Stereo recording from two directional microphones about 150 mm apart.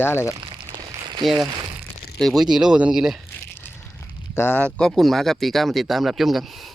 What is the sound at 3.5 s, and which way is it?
Speech, 15° left (ahead or behind).